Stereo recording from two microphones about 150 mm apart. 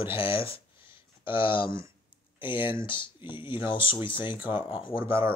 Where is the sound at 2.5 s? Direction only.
15° right (ahead or behind).